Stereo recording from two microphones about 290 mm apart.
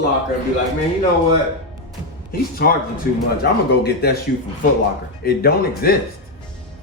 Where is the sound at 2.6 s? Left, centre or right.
Left.